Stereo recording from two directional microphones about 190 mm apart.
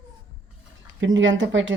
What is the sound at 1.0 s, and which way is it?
Speech, 75° right (ahead or behind).